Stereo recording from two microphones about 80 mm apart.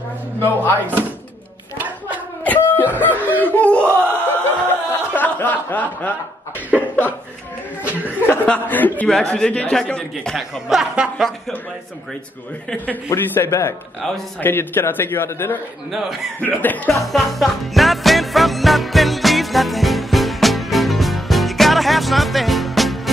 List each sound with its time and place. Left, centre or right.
0.4 s a man's voice: left
2.4 s a sound: left
3.0 s snicker: left
6.7 s speech: centre
7.8 s chuckle: centre
8.5 s a man's voice: left
9.0 s a man's voice: centre
10.2 s a man's voice: centre
13.1 s a man's voice: left
14.4 s a man's voice: left
15.9 s a man's voice: centre
16.3 s a man's voice: left
17.0 s music: centre